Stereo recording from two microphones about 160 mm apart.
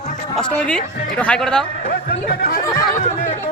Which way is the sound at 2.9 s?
45° left (ahead or behind).